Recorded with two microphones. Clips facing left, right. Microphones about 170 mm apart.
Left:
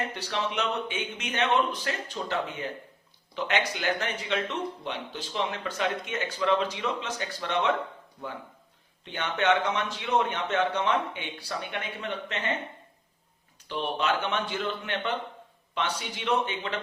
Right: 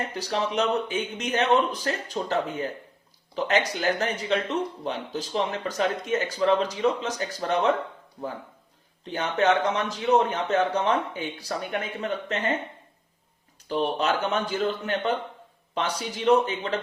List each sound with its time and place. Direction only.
0.0 s speech: 40° right (ahead or behind)
9.0 s speech: 40° right (ahead or behind)
13.7 s speech: 40° right (ahead or behind)